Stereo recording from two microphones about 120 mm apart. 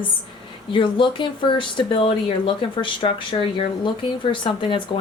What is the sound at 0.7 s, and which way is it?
A woman's voice, 45° left (ahead or behind).